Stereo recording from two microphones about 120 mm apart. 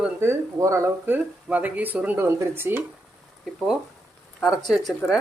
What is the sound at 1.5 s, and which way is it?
Speech, 15° right (ahead or behind).